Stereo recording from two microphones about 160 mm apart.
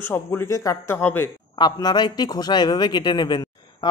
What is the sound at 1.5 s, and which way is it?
A man's voice, 25° left (ahead or behind).